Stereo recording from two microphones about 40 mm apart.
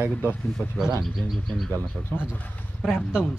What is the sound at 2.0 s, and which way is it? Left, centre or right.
Speech, centre.